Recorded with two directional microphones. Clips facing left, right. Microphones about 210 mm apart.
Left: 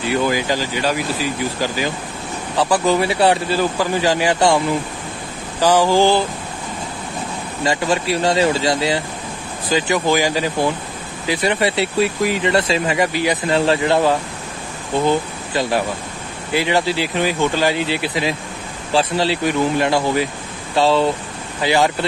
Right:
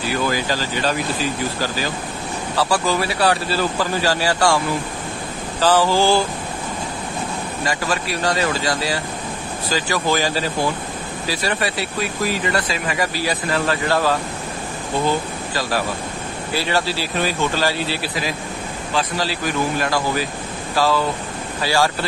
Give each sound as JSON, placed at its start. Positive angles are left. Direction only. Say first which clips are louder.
{"t": 0.1, "sound": "speech", "louder": "left 4 dB", "side_deg": 15}
{"t": 5.6, "sound": "speech", "louder": "left 3 dB", "side_deg": 15}
{"t": 7.6, "sound": "speech", "louder": "left 6 dB", "side_deg": 25}